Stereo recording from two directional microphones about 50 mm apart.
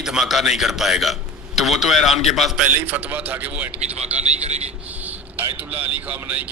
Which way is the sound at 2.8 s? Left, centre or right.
Right.